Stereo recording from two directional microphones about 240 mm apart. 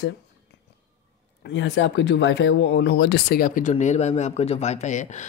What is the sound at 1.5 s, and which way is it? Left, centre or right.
Speech, left.